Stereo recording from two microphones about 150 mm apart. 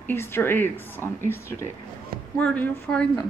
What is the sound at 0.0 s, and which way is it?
A woman's voice, 15° left (ahead or behind).